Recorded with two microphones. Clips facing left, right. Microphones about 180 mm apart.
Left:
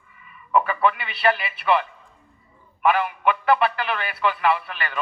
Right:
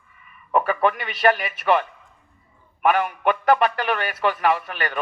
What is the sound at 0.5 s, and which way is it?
A man's voice, 50° right (ahead or behind).